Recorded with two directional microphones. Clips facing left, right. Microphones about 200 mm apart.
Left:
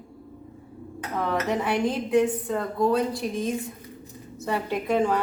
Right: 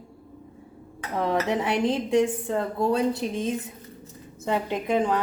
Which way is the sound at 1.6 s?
25° right (ahead or behind).